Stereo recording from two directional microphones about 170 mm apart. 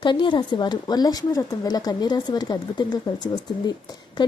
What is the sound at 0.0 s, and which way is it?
A woman's voice, 30° left (ahead or behind).